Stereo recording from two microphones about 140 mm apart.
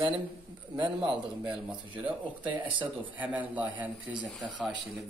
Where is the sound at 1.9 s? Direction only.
35° right (ahead or behind).